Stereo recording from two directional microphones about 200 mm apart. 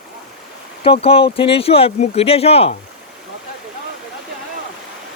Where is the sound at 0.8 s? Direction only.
30° left (ahead or behind).